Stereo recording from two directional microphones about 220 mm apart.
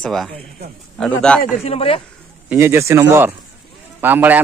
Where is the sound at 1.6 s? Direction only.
25° left (ahead or behind).